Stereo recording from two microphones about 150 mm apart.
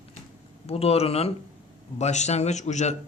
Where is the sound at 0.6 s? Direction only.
40° left (ahead or behind).